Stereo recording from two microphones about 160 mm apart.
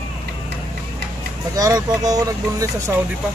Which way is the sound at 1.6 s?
25° right (ahead or behind).